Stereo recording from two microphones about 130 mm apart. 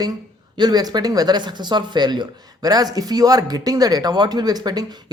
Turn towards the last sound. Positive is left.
turn(degrees=-30)  # may be behind; listen again after turning